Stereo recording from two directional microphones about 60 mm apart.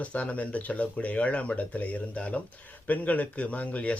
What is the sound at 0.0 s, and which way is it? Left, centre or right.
Speech, left.